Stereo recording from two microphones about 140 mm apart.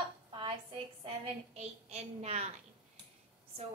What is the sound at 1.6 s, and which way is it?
Speech, 50° right (ahead or behind).